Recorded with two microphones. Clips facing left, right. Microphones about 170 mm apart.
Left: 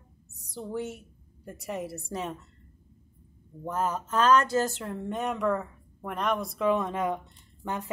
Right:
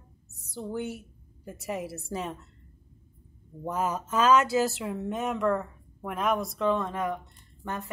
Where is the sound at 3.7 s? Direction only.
10° right (ahead or behind); by 7.9 s 15° left (ahead or behind).